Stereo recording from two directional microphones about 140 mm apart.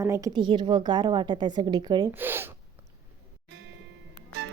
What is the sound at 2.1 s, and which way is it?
Speech, 15° right (ahead or behind).